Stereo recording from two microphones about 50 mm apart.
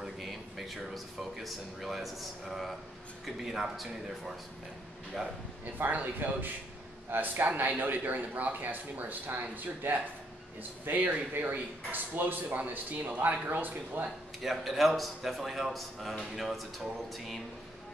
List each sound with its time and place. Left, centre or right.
0.0 s a man's voice: centre
5.8 s speech: right
14.4 s a man's voice: centre